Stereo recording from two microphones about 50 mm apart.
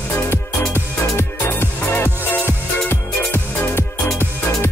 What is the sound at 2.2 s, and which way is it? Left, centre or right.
Music, left.